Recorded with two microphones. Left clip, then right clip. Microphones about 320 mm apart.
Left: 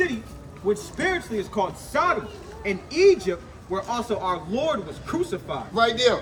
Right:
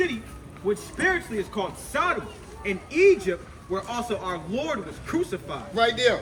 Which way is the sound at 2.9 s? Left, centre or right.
Centre.